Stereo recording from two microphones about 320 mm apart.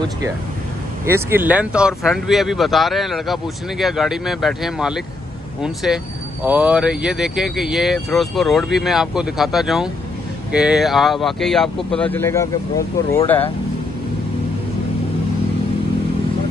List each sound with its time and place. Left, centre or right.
1.0 s speech: centre
6.4 s speech: centre